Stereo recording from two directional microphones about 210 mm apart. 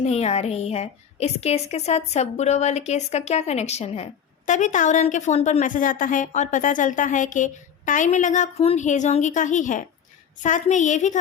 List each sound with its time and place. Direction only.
0.0 s a woman's voice: 30° left (ahead or behind)